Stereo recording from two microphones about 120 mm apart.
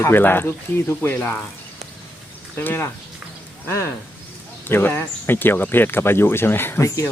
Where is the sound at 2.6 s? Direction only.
15° left (ahead or behind).